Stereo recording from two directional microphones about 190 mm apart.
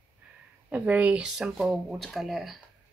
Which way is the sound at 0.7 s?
5° right (ahead or behind).